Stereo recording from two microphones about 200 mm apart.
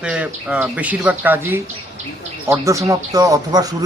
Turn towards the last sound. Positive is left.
turn(degrees=-20)  # may be behind; listen again after turning